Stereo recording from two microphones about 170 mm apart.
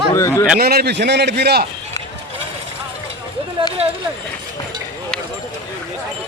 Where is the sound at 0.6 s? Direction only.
65° right (ahead or behind).